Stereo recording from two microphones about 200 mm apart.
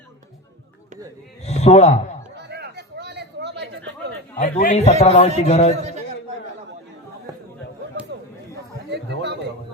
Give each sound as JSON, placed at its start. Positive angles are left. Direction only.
{"t": 1.4, "sound": "speech", "side_deg": 35}
{"t": 2.3, "sound": "chatter", "side_deg": -55}
{"t": 4.4, "sound": "a man's voice", "side_deg": 35}
{"t": 8.9, "sound": "chatter", "side_deg": -60}